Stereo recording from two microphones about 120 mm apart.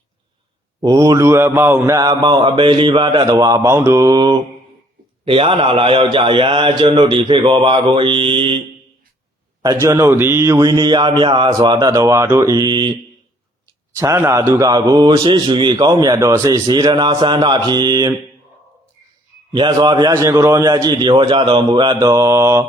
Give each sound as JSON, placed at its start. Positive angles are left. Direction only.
{"t": 0.8, "sound": "mantra", "side_deg": -30}
{"t": 2.0, "sound": "a man's voice", "side_deg": -40}
{"t": 5.2, "sound": "a man's voice", "side_deg": -50}
{"t": 9.8, "sound": "a man's voice", "side_deg": -25}
{"t": 13.9, "sound": "mantra", "side_deg": -20}
{"t": 14.7, "sound": "a man's voice", "side_deg": -35}
{"t": 19.5, "sound": "a man's voice", "side_deg": -40}